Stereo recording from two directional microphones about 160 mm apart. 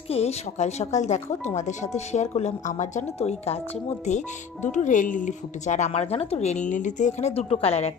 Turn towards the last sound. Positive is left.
turn(degrees=40)  # may be behind; listen again after turning